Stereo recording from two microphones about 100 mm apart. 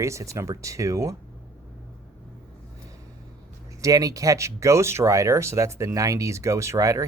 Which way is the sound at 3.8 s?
35° right (ahead or behind).